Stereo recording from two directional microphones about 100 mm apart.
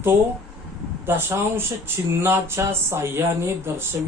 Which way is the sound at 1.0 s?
25° right (ahead or behind).